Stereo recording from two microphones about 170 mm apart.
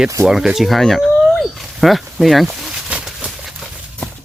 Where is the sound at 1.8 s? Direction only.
Centre (ahead or behind).